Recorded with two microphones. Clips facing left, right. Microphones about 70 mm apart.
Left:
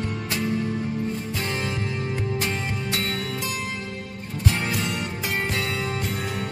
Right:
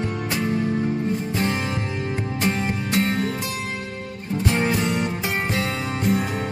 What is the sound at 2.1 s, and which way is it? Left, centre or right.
Music, right.